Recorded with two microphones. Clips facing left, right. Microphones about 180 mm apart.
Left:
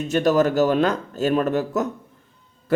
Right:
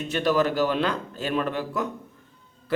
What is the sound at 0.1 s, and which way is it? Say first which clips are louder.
A man's voice: left 5 dB; 45° left (ahead or behind).